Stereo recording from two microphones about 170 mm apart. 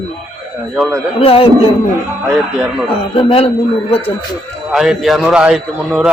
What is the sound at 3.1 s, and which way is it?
Speech, 35° left (ahead or behind).